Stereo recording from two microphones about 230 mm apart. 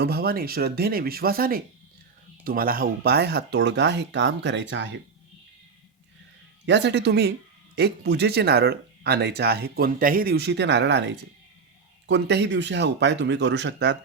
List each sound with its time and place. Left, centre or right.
0.0 s speech: right
6.7 s speech: right